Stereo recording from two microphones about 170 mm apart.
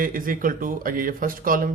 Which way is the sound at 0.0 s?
55° right (ahead or behind).